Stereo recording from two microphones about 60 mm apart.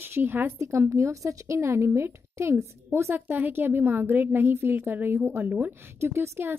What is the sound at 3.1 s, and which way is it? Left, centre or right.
A woman's voice, right.